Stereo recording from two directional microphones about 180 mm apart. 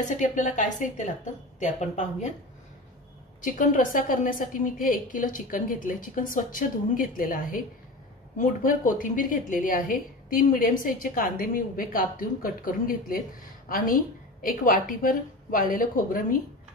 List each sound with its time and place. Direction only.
0.2 s a woman's voice: 45° left (ahead or behind)
3.4 s a woman's voice: 50° left (ahead or behind)